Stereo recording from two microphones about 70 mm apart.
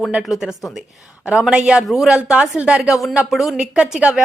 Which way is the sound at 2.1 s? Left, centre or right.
Centre.